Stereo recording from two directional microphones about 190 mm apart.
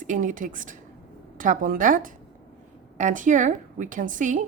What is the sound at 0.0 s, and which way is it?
A woman's voice, 40° right (ahead or behind).